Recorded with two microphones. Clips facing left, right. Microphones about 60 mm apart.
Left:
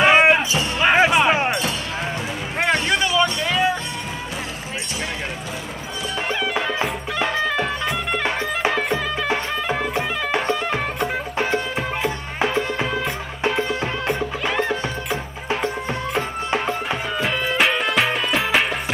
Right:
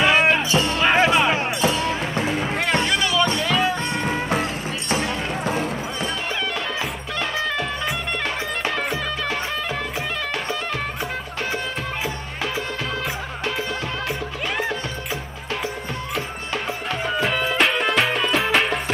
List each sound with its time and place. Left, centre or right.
0.0 s a sound: left
1.5 s music: centre
2.6 s music: left
17.2 s music: centre